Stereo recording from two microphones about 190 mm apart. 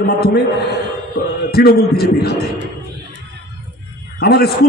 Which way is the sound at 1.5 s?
55° left (ahead or behind).